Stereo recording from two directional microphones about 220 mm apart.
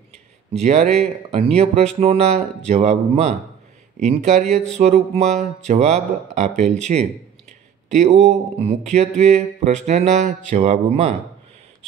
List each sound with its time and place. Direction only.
0.5 s speech: 30° right (ahead or behind)